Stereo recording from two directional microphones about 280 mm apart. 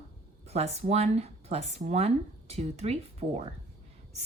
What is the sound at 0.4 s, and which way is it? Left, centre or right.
Speech, right.